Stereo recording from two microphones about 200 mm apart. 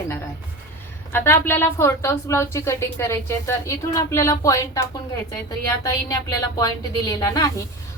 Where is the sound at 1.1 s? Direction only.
10° left (ahead or behind).